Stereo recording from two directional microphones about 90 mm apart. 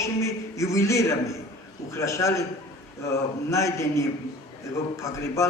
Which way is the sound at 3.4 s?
35° left (ahead or behind).